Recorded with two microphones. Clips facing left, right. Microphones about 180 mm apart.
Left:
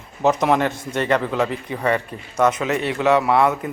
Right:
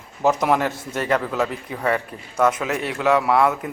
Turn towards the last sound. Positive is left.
turn(degrees=0)  # may be behind; listen again after turning